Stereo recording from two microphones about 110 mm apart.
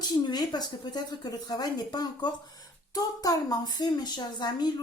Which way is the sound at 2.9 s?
35° left (ahead or behind).